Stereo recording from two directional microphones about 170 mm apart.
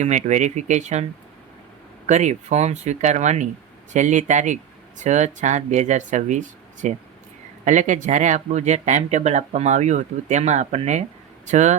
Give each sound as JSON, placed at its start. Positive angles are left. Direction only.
{"t": 0.0, "sound": "speech", "side_deg": -45}
{"t": 2.0, "sound": "speech", "side_deg": -45}